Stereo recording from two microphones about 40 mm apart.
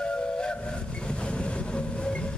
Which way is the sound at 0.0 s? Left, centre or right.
Left.